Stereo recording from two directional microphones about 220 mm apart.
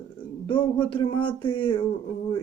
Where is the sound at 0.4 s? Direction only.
25° left (ahead or behind).